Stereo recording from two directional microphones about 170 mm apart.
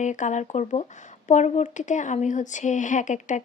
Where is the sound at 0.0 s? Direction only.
45° left (ahead or behind).